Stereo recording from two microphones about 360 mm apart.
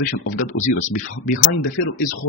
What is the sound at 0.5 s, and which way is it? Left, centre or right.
Speech, left.